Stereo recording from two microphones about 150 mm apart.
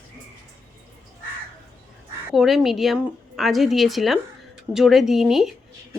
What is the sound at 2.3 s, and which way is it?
Speech, centre (ahead or behind).